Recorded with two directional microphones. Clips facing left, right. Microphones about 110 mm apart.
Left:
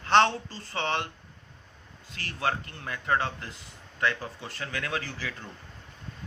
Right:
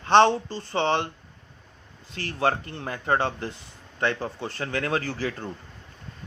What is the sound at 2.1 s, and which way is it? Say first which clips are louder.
Speech: right 5 dB; 35° right (ahead or behind).